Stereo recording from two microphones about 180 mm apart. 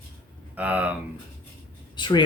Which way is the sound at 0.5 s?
10° right (ahead or behind).